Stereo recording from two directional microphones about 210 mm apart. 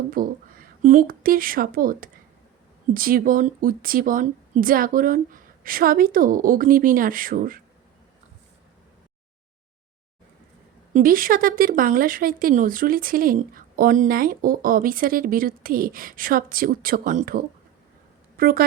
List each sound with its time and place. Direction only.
0.1 s a woman's voice: 40° right (ahead or behind)
10.9 s speech: 40° right (ahead or behind)